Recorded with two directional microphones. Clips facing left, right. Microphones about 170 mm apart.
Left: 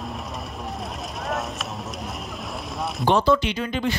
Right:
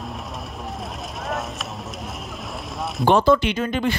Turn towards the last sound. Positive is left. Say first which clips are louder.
# right 3 dB
turn(degrees=-50)  # may be behind; listen again after turning